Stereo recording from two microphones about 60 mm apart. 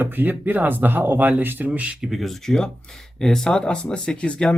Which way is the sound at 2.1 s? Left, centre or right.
Centre.